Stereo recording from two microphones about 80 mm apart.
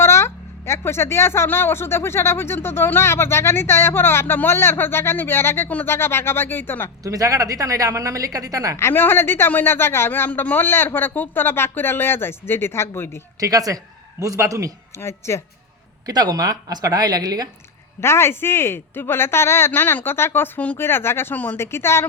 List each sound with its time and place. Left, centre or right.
0.0 s a woman's voice: left
5.6 s speech: centre
5.9 s speech: left
7.0 s a woman's voice: right
8.7 s speech: left
13.4 s a woman's voice: right
14.9 s a woman's voice: left
16.0 s a woman's voice: right
18.0 s a woman's voice: left